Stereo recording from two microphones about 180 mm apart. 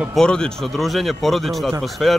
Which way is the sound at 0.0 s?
Centre (ahead or behind).